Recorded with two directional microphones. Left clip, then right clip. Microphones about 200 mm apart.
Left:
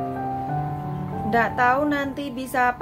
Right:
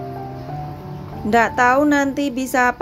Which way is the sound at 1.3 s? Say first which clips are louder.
Right 5 dB; 40° right (ahead or behind).